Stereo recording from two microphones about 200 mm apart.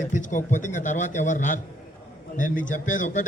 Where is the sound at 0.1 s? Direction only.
40° left (ahead or behind).